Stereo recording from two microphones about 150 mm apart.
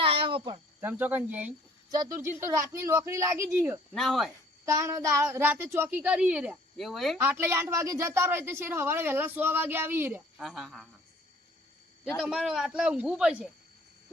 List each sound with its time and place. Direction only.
0.0 s cricket: 35° right (ahead or behind)
0.8 s a woman's voice: 15° right (ahead or behind)
1.9 s a woman's voice: 20° right (ahead or behind)
3.9 s a man's voice: centre (ahead or behind)
4.6 s a woman's voice: 20° right (ahead or behind); by 7.2 s centre (ahead or behind)
7.2 s a woman's voice: 15° right (ahead or behind)
10.3 s a man's voice: centre (ahead or behind)
12.2 s a man's voice: centre (ahead or behind)